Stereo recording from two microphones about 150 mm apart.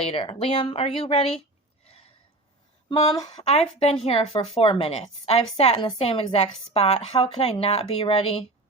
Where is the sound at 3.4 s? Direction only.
45° left (ahead or behind).